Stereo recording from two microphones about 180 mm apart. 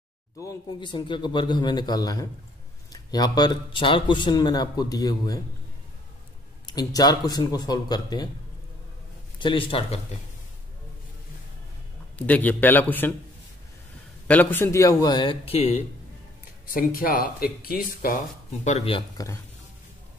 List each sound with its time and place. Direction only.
0.4 s a man's voice: 20° left (ahead or behind)
6.6 s a man's voice: 20° left (ahead or behind)
9.4 s a man's voice: 30° left (ahead or behind)
12.2 s a man's voice: 10° left (ahead or behind)
14.2 s a man's voice: 10° left (ahead or behind); by 15.8 s 35° left (ahead or behind)
16.6 s speech: 50° left (ahead or behind); by 19.0 s 35° left (ahead or behind)
19.1 s a man's voice: 15° left (ahead or behind)